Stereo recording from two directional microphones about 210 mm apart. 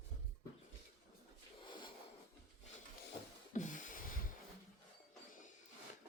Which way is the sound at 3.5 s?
35° left (ahead or behind).